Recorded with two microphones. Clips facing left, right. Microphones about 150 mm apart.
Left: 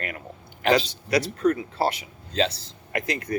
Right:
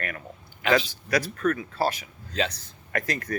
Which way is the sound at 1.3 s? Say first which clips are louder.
Left 3 dB; 20° left (ahead or behind).